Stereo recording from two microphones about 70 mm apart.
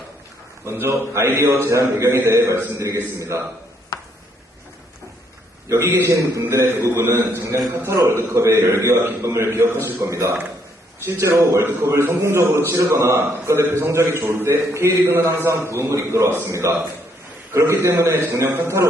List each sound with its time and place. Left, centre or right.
0.7 s a man's voice: right
1.7 s a man's voice: right
5.7 s a man's voice: right
10.0 s a man's voice: right